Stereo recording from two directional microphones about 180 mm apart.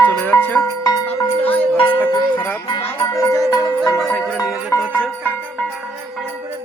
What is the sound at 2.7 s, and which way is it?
Music, 30° left (ahead or behind).